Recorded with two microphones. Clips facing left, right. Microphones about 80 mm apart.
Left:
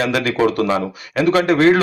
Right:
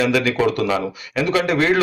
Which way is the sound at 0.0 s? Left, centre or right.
Left.